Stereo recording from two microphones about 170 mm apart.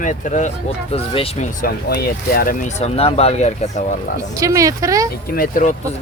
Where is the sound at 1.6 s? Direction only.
60° left (ahead or behind).